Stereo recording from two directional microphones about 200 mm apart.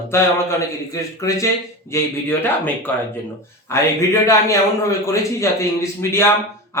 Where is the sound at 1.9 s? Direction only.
15° left (ahead or behind).